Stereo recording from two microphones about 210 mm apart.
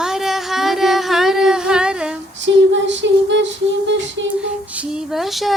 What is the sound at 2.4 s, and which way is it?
Female singing, 60° right (ahead or behind).